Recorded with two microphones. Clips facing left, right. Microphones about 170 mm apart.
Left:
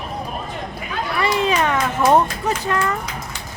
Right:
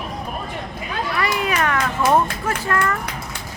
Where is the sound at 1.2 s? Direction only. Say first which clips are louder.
Left 4 dB; 25° left (ahead or behind).